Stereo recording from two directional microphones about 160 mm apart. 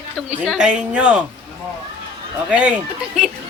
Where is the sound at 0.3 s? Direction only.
5° right (ahead or behind).